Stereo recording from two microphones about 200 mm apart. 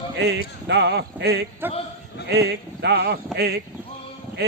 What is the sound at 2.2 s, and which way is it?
A man's voice, 55° right (ahead or behind).